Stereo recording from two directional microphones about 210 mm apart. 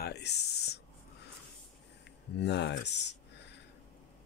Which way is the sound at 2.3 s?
55° left (ahead or behind).